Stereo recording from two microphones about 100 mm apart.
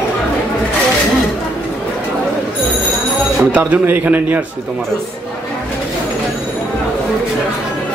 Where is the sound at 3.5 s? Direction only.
20° right (ahead or behind).